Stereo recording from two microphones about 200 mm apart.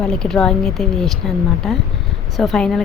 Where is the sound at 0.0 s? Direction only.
5° left (ahead or behind).